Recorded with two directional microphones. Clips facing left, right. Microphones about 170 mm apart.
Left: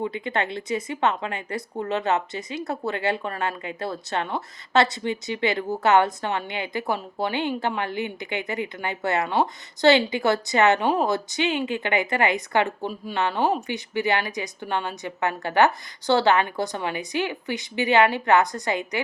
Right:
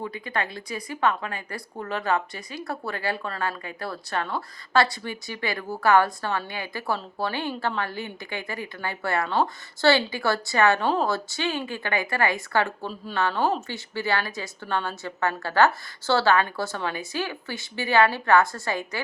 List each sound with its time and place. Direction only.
0.0 s speech: 25° left (ahead or behind)